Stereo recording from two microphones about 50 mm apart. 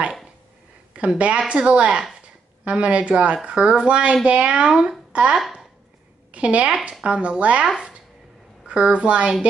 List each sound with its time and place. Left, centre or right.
0.9 s a child's voice: right
7.6 s speech: centre
8.6 s a child's voice: right